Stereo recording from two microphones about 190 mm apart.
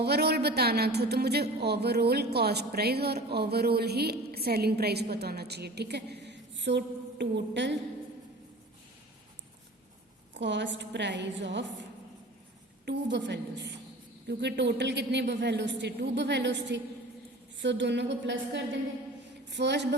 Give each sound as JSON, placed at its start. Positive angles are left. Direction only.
{"t": 0.0, "sound": "a woman's voice", "side_deg": -60}
{"t": 10.3, "sound": "a woman's voice", "side_deg": -70}